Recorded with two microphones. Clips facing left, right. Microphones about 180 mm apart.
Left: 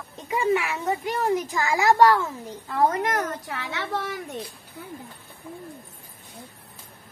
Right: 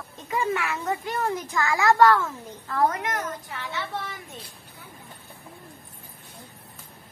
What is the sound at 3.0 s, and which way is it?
A child's voice, 60° left (ahead or behind).